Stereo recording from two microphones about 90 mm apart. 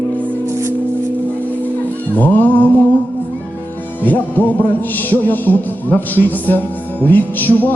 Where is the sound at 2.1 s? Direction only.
20° left (ahead or behind).